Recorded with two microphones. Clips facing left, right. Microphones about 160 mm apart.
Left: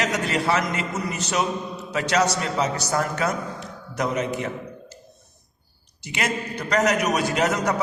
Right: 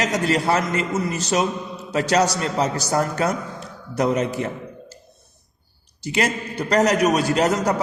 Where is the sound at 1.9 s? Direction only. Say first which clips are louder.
Right 3 dB; 35° right (ahead or behind).